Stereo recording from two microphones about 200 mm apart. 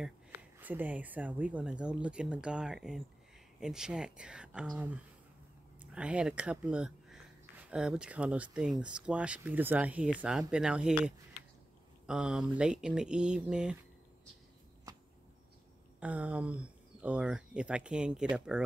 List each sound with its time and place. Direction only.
0.0 s speech: 10° right (ahead or behind)
14.9 s a sound: 20° right (ahead or behind)
16.0 s speech: 5° right (ahead or behind)